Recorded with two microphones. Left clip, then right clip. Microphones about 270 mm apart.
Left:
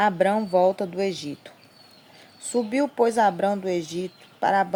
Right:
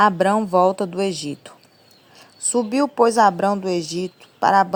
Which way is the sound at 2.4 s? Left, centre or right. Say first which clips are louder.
Right 4 dB; right.